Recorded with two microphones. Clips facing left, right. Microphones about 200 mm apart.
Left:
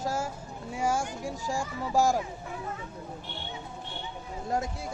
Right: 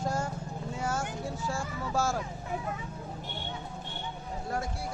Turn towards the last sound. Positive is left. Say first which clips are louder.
# left 3 dB
turn(degrees=20)  # may be behind; listen again after turning